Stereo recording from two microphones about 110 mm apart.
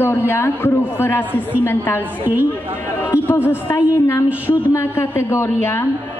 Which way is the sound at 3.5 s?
25° left (ahead or behind).